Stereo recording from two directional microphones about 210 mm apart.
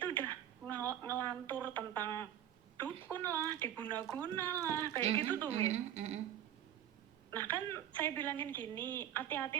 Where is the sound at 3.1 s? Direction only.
10° left (ahead or behind).